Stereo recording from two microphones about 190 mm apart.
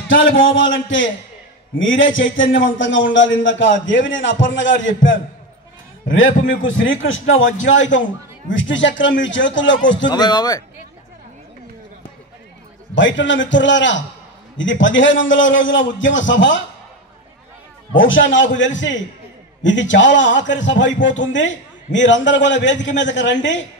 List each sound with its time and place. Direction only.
0.6 s a man's voice: 85° left
10.0 s speech: 20° left (ahead or behind)
12.9 s a man's voice: 75° left (ahead or behind)
17.9 s a man's voice: 90° left; by 23.6 s 75° left (ahead or behind)